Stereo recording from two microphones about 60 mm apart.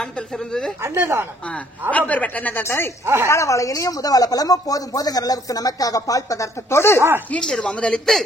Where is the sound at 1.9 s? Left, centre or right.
Left.